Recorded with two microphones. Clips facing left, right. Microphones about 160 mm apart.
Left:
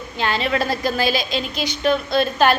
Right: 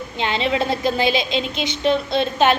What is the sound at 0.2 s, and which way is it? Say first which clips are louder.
A woman's voice: even; 20° right (ahead or behind).